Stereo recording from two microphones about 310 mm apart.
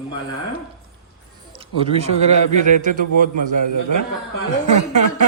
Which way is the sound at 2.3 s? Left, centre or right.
Right.